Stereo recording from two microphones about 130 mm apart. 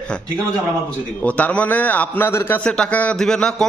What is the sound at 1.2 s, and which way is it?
A man's voice, 10° left (ahead or behind).